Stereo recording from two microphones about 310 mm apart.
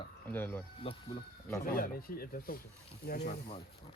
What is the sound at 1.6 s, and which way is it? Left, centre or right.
Speech, left.